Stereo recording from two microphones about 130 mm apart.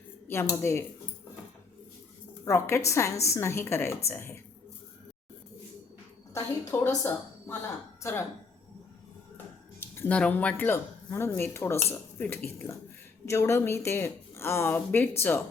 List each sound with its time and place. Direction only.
0.3 s speech: 20° left (ahead or behind)
2.4 s speech: 20° left (ahead or behind)
6.3 s a woman's voice: 20° left (ahead or behind)
9.9 s a sound: 20° left (ahead or behind)
10.2 s speech: 10° left (ahead or behind)